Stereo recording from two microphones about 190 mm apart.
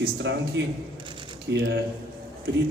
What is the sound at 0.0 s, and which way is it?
A man's voice, 65° right (ahead or behind).